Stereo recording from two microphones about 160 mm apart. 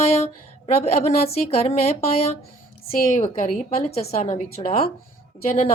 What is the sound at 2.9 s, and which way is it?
A woman's voice, 50° left (ahead or behind).